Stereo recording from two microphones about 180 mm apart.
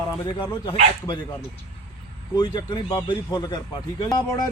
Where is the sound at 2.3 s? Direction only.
25° left (ahead or behind).